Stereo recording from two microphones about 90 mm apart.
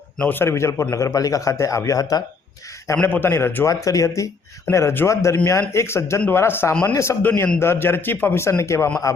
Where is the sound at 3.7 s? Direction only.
40° left (ahead or behind).